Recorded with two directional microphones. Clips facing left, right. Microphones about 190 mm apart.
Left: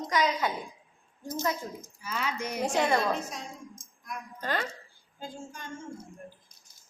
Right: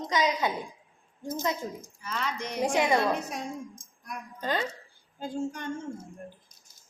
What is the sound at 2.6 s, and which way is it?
Speech, 10° right (ahead or behind).